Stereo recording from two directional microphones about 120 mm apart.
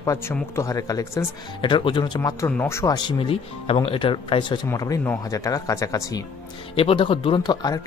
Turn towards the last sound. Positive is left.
turn(degrees=35)  # may be behind; listen again after turning